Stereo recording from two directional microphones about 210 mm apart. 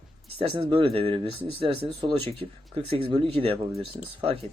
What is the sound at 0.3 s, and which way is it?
Speech, 25° right (ahead or behind).